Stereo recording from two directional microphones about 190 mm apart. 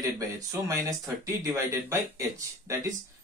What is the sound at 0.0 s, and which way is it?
Speech, 15° right (ahead or behind).